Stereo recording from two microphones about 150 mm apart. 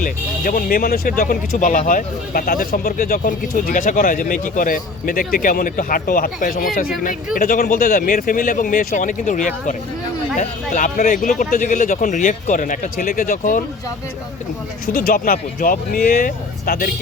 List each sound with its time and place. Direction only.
0.0 s speech: 65° left (ahead or behind)
14.9 s speech: 75° left (ahead or behind)